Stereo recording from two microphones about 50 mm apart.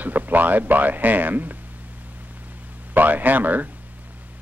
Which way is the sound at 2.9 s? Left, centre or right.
Right.